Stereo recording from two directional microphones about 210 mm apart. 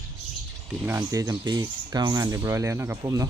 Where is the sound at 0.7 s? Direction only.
5° right (ahead or behind).